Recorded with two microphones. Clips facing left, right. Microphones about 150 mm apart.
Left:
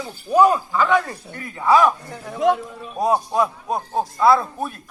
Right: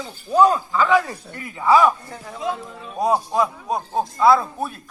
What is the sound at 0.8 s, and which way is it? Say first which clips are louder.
Speech: right 2 dB; centre (ahead or behind).